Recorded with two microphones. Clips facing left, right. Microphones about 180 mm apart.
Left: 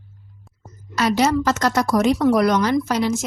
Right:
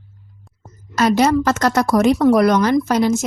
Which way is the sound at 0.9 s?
50° right (ahead or behind).